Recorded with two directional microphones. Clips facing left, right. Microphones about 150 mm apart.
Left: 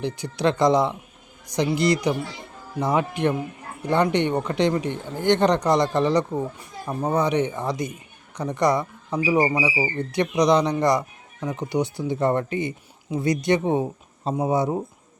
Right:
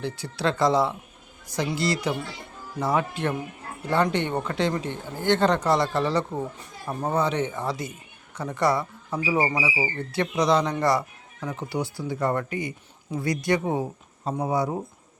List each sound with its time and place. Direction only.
0.0 s speech: 15° left (ahead or behind)